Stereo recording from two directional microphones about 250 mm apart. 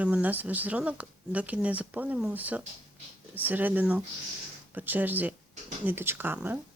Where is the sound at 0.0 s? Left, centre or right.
Centre.